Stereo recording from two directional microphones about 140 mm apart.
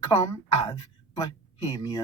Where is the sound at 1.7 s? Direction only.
25° left (ahead or behind).